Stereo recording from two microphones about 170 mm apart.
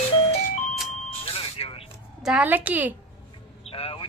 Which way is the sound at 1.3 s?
35° left (ahead or behind).